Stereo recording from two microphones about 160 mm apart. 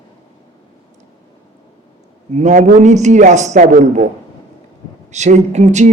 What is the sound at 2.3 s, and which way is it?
Speech, 50° right (ahead or behind).